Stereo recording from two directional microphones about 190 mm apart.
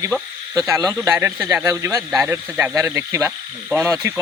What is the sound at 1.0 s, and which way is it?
Speech, 15° right (ahead or behind).